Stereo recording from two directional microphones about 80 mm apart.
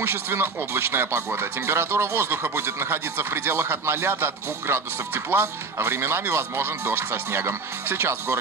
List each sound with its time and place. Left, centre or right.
0.0 s speech: right